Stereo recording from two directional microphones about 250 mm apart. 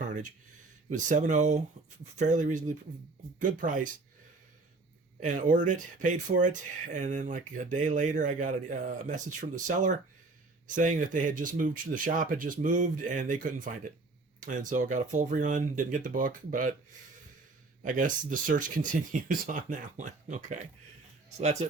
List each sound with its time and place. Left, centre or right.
0.0 s a sound: right
0.9 s speech: right
5.2 s speech: right
17.8 s speech: right